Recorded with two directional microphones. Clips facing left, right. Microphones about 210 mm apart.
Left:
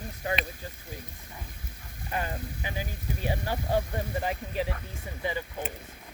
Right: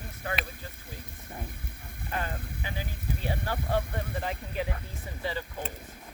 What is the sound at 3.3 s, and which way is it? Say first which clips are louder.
Speech: left 2 dB; 15° left (ahead or behind).